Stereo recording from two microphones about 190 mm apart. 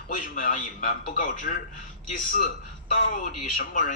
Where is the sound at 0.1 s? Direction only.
45° left (ahead or behind).